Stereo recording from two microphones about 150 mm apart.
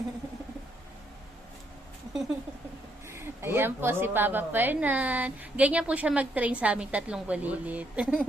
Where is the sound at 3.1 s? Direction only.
15° right (ahead or behind).